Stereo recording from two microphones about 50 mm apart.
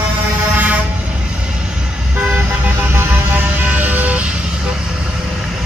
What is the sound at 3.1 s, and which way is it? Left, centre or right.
Vehicle, right.